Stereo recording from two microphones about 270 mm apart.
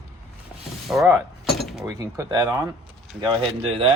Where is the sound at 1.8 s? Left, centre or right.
Centre.